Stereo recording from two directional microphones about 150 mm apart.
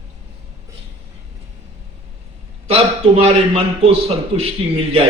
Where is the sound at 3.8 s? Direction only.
40° right (ahead or behind).